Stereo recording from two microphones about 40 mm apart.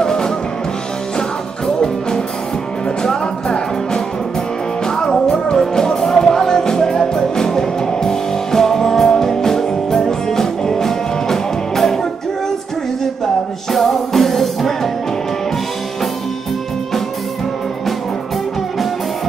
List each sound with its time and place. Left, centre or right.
0.0 s music: centre
1.8 s music: centre